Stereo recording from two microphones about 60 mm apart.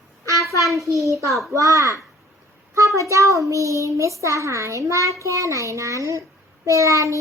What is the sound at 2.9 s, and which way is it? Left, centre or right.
A child's voice, right.